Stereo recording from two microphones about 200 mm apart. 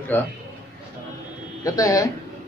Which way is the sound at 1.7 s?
15° left (ahead or behind).